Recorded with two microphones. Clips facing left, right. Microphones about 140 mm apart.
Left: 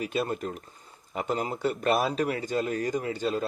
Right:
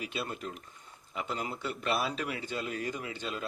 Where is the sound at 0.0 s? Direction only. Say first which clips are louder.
Left 8 dB; 45° left (ahead or behind).